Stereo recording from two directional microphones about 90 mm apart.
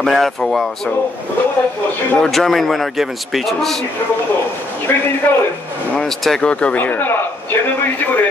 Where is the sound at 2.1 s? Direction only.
5° left (ahead or behind).